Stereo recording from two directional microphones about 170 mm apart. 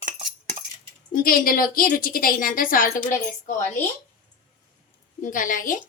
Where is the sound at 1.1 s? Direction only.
55° left (ahead or behind).